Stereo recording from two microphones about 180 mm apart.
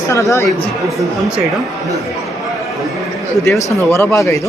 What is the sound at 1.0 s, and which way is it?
Speech, 5° right (ahead or behind).